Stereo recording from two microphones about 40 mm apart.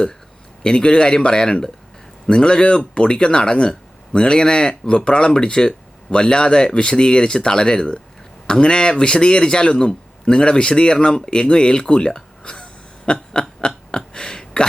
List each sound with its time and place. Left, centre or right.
0.6 s a man's voice: left
13.1 s a sound: left
13.6 s hiccup: left